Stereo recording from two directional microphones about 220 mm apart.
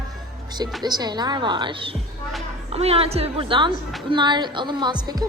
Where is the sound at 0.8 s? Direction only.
20° right (ahead or behind).